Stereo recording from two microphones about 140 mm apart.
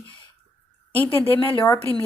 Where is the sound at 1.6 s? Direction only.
20° left (ahead or behind).